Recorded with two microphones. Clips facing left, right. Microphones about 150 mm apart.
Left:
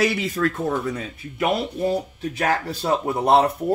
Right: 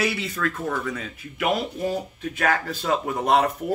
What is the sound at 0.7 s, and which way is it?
Speech, 30° left (ahead or behind).